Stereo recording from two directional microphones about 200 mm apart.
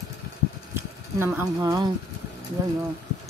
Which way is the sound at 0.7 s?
10° right (ahead or behind).